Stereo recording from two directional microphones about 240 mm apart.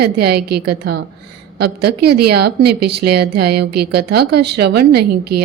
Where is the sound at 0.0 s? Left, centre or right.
Right.